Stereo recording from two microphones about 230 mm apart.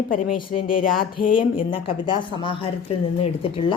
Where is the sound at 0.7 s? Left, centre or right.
Left.